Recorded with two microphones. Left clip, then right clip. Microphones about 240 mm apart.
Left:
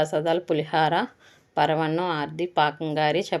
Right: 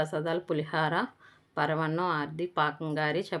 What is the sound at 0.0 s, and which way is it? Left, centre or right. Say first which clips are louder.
Speech: left 7 dB; centre.